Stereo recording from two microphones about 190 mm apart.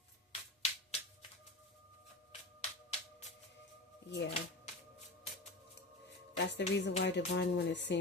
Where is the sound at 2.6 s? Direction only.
35° left (ahead or behind).